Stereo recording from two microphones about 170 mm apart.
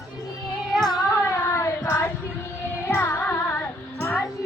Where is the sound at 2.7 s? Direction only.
15° left (ahead or behind).